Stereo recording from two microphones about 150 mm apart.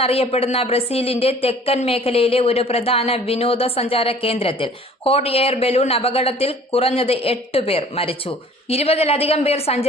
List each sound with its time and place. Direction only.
0.0 s a woman's voice: 40° left (ahead or behind)